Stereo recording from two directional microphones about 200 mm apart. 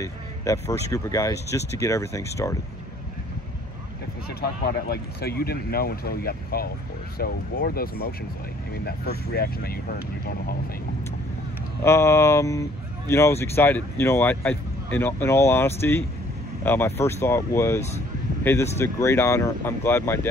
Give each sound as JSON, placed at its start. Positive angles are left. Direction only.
{"t": 0.0, "sound": "speech", "side_deg": 15}
{"t": 4.3, "sound": "speech", "side_deg": 55}
{"t": 11.8, "sound": "speech", "side_deg": 15}